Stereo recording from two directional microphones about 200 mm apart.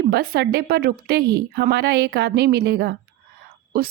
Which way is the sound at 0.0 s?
50° right (ahead or behind).